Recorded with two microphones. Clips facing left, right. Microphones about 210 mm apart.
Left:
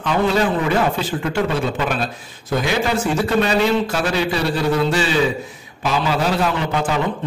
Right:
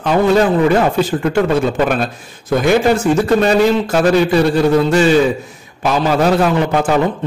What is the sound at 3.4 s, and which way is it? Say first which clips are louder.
A man's voice: right 5 dB; 45° right (ahead or behind).